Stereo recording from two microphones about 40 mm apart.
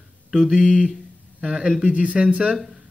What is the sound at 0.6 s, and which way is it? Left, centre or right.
Speech, centre.